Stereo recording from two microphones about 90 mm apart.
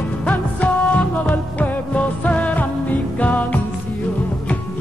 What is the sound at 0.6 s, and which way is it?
Music, 15° left (ahead or behind).